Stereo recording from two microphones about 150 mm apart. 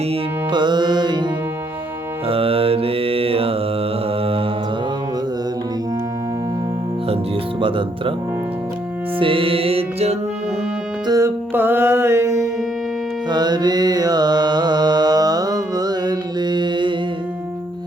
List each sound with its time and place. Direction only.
0.1 s music: 30° right (ahead or behind)
2.2 s mantra: 40° right (ahead or behind)
7.6 s speech: 35° right (ahead or behind)
9.1 s music: 35° right (ahead or behind)
11.0 s music: 25° right (ahead or behind)
11.5 s mantra: 15° right (ahead or behind); by 16.9 s 30° right (ahead or behind)